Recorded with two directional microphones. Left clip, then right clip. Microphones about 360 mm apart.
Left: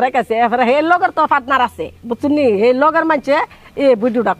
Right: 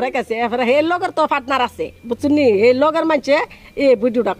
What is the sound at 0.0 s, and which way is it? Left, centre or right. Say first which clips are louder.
Speech: left 5 dB; left.